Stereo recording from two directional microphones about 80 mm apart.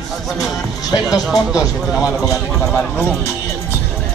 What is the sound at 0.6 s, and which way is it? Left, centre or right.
Speech, left.